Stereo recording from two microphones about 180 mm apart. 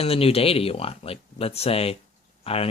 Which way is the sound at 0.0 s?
30° left (ahead or behind).